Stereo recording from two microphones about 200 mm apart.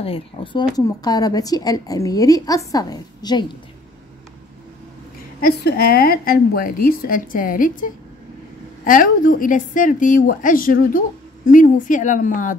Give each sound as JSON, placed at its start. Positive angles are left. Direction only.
{"t": 0.0, "sound": "a woman's voice", "side_deg": 25}
{"t": 5.4, "sound": "a woman's voice", "side_deg": 50}